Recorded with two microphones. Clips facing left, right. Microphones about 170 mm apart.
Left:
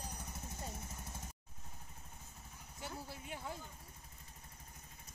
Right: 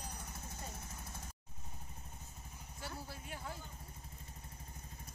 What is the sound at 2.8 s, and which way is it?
Vehicle, 20° left (ahead or behind).